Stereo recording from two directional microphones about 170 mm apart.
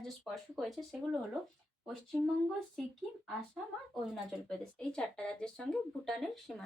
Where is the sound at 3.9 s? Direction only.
5° left (ahead or behind).